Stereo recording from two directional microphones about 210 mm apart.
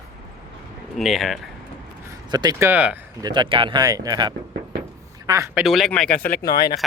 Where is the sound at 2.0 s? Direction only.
20° right (ahead or behind).